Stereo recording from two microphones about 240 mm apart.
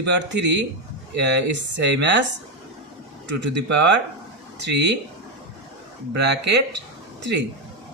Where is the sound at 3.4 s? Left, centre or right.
Right.